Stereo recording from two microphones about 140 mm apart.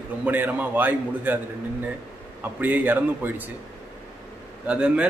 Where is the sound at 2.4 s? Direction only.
15° right (ahead or behind).